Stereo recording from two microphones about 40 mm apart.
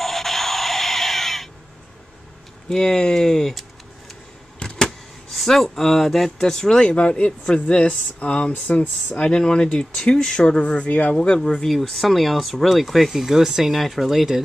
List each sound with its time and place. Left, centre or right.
0.0 s a sound: centre
2.7 s speech: centre
4.6 s a sound: left
4.8 s speech: centre
6.8 s speech: left
10.9 s speech: left
11.3 s speech: centre